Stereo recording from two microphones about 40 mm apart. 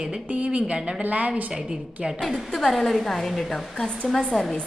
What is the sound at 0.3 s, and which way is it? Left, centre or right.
Speech, right.